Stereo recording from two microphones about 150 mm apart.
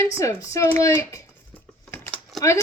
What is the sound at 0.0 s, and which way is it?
A woman's voice, 20° left (ahead or behind).